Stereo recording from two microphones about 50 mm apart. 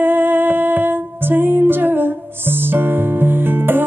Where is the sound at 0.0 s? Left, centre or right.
Right.